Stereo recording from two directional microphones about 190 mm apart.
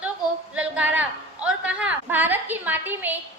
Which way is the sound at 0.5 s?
5° right (ahead or behind).